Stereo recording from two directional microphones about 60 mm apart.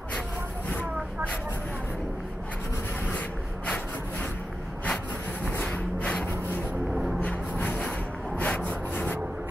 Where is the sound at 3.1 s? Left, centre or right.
Left.